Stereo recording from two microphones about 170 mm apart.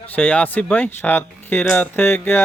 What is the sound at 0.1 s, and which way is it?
Speech, 10° left (ahead or behind).